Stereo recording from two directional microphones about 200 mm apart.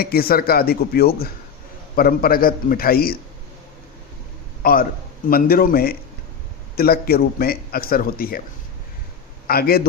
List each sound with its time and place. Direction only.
0.0 s a man's voice: 50° left (ahead or behind)
4.6 s a man's voice: 45° left (ahead or behind)
9.5 s a man's voice: 50° left (ahead or behind)